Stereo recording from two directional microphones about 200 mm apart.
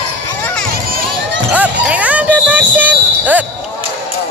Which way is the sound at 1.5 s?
5° right (ahead or behind).